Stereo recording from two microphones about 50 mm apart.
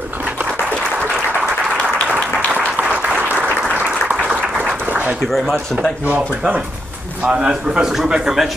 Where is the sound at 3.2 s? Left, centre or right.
Right.